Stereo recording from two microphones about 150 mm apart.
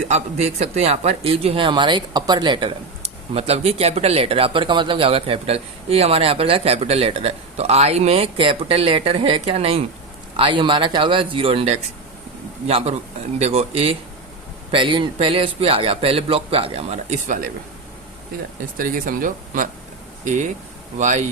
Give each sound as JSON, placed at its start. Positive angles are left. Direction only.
{"t": 0.1, "sound": "speech", "side_deg": -45}
{"t": 18.8, "sound": "speech", "side_deg": -65}
{"t": 20.2, "sound": "speech", "side_deg": -55}